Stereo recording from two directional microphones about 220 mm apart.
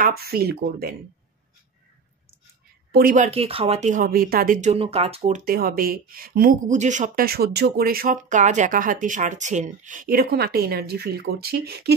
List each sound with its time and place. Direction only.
0.0 s speech: 45° right (ahead or behind)
2.9 s speech: 40° right (ahead or behind)
3.3 s speech: 25° right (ahead or behind)
5.4 s speech: 40° right (ahead or behind)